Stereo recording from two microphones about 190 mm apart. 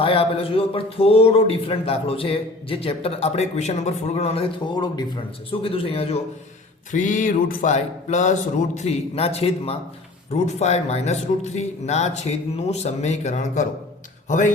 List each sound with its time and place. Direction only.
0.0 s a man's voice: 30° left (ahead or behind)
6.9 s a man's voice: 40° left (ahead or behind)